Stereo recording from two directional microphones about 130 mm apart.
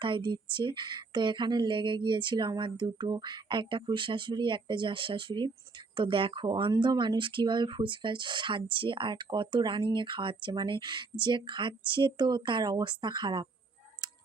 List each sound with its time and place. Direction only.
0.0 s speech: 40° right (ahead or behind)